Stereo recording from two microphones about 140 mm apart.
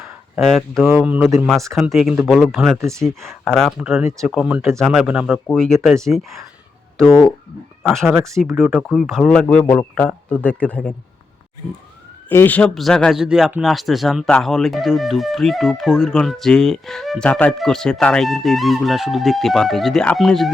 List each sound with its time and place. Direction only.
0.0 s a sound: centre (ahead or behind)
0.8 s speech: 10° right (ahead or behind)
5.5 s speech: 5° left (ahead or behind)
8.1 s speech: 20° right (ahead or behind)
8.4 s speech: centre (ahead or behind)
12.3 s speech: 15° left (ahead or behind)